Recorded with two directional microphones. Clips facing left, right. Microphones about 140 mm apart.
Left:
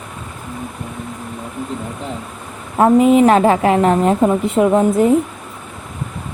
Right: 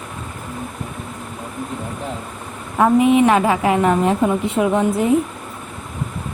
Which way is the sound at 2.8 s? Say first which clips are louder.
Left 3 dB; 40° left (ahead or behind).